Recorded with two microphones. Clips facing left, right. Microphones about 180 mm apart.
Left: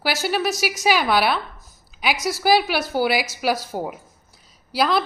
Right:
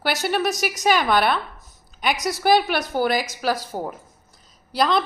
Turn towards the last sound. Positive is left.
turn(degrees=5)  # may be behind; listen again after turning